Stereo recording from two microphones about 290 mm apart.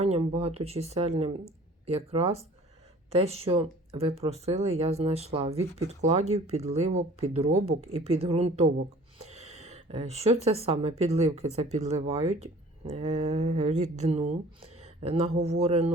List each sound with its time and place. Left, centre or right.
0.0 s speech: right